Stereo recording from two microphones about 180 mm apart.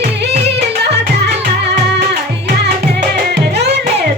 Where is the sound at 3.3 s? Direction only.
70° right (ahead or behind).